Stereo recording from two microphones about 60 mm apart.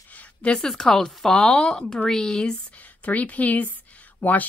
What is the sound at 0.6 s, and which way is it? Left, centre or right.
Speech, centre.